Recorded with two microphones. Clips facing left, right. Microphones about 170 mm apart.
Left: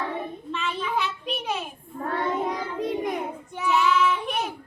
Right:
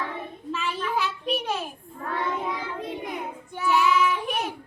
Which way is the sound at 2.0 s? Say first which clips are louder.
Left 2 dB; 45° left (ahead or behind).